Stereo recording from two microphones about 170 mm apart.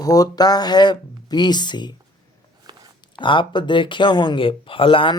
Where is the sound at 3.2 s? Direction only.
30° left (ahead or behind).